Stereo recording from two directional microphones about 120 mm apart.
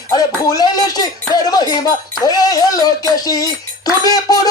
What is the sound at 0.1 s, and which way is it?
Speech, 30° left (ahead or behind).